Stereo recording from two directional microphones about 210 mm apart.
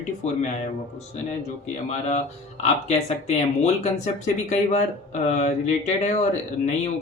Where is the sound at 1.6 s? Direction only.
35° left (ahead or behind).